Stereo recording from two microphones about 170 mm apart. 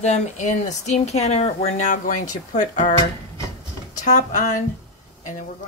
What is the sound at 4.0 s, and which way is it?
Speech, 45° left (ahead or behind).